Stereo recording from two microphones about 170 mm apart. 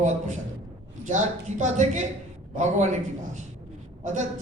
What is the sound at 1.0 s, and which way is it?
A man's voice, 45° right (ahead or behind).